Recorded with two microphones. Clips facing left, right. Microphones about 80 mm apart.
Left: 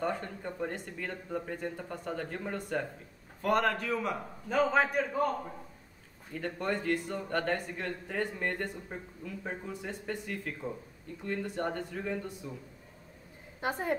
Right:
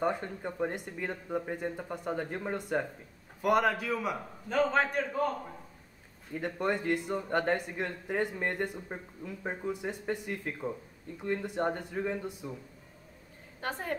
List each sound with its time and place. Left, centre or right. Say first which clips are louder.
0.0 s a man's voice: right 2 dB; centre
6.3 s a man's voice: right 2 dB; centre
13.6 s a woman's voice: left 3 dB; centre